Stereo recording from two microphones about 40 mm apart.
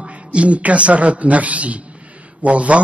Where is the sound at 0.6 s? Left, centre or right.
Right.